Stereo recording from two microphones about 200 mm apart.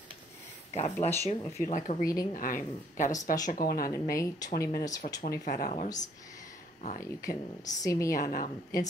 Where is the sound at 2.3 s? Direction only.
45° left (ahead or behind).